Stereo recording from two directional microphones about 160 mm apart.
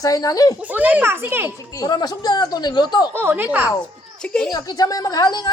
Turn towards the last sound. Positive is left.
turn(degrees=25)  # may be behind; listen again after turning